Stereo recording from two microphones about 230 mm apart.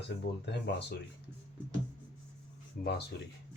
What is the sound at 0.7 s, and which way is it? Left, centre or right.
Speech, left.